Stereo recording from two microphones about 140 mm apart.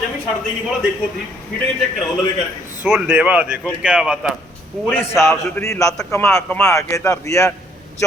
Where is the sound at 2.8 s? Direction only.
5° right (ahead or behind).